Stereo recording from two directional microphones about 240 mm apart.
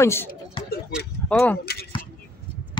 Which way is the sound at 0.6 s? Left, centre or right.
Left.